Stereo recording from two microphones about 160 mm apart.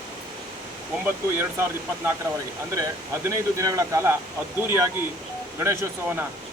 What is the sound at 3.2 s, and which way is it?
Speech, 20° right (ahead or behind).